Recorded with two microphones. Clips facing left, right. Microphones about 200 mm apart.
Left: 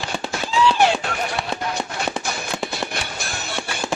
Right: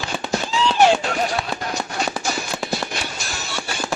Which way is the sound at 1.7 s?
55° left (ahead or behind).